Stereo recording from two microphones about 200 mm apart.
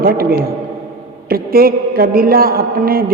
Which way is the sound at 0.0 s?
45° right (ahead or behind).